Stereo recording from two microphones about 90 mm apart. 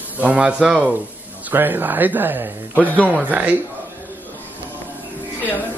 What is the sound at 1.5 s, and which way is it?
Speech, 25° right (ahead or behind).